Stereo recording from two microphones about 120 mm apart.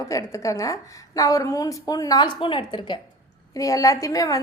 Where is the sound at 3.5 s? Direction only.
30° left (ahead or behind).